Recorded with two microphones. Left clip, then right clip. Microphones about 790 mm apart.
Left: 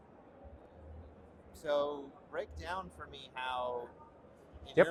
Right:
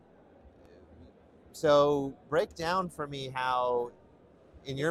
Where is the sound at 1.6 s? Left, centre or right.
Right.